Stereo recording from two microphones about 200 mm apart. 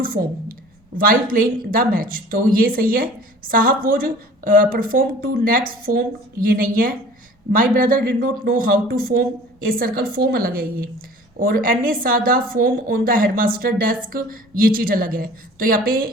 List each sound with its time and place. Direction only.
0.0 s a woman's voice: 45° right (ahead or behind)